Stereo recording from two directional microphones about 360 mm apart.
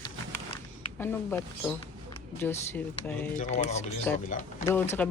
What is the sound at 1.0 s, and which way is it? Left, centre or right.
Speech, centre.